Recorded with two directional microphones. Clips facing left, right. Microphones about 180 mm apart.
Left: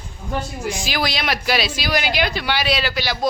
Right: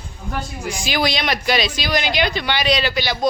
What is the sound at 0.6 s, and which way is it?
Speech, centre (ahead or behind).